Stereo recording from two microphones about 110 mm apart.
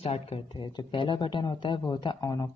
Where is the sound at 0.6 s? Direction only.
45° left (ahead or behind).